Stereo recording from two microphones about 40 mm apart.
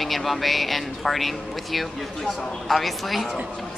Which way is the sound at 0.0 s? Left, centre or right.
Centre.